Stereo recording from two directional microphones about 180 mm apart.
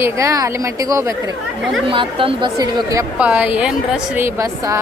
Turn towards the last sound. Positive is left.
turn(degrees=-15)  # may be behind; listen again after turning